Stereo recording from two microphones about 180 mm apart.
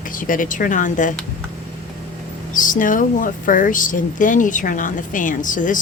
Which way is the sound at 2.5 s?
45° left (ahead or behind).